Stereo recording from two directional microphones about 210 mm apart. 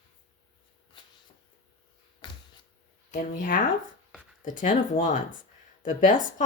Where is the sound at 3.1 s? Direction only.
40° left (ahead or behind).